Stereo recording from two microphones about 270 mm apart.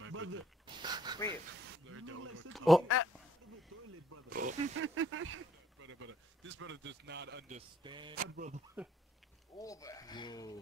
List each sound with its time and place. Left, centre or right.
0.0 s dog: right
0.8 s a man's voice: centre
1.7 s speech: right
2.5 s speech: centre
4.3 s speech: right
4.7 s speech: right
7.4 s a man's voice: right
8.2 s speech: right
8.8 s speech: centre
9.6 s speech: centre